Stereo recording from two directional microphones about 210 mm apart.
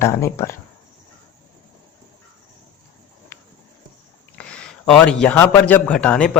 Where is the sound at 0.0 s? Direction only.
15° left (ahead or behind).